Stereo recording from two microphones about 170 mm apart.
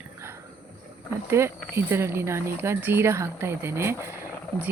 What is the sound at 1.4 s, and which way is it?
Speech, 15° right (ahead or behind).